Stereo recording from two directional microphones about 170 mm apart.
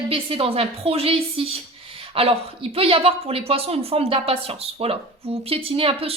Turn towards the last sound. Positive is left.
turn(degrees=-35)  # may be behind; listen again after turning